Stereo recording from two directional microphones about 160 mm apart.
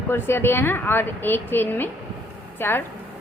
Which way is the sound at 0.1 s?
15° left (ahead or behind).